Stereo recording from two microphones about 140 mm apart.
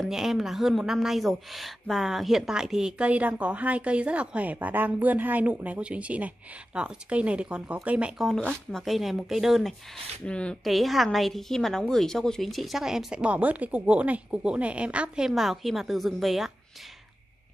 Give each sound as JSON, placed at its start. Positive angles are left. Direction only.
{"t": 0.0, "sound": "a woman's voice", "side_deg": -5}